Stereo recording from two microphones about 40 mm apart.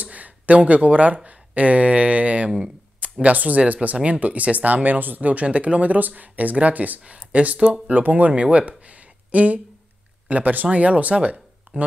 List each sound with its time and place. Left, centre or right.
0.0 s speech: right